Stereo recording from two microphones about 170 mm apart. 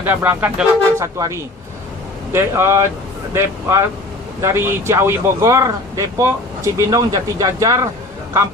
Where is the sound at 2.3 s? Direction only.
15° right (ahead or behind).